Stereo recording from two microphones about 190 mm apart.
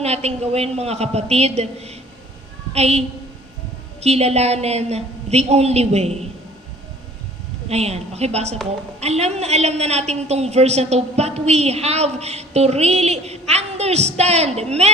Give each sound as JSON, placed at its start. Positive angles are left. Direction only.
{"t": 0.0, "sound": "a woman's voice", "side_deg": -35}
{"t": 4.0, "sound": "a woman's voice", "side_deg": -35}
{"t": 7.7, "sound": "a woman's voice", "side_deg": -35}